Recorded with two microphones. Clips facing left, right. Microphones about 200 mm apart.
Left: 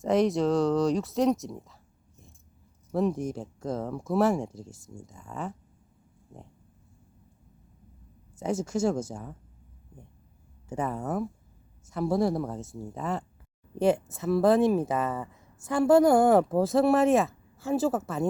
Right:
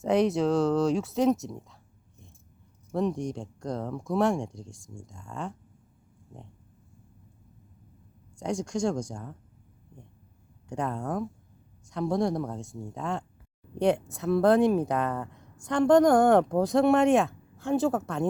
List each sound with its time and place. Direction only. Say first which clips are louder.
0.0 s speech: even; centre (ahead or behind)
8.4 s speech: left 1 dB; 5° left (ahead or behind)
10.7 s speech: even; 5° left (ahead or behind)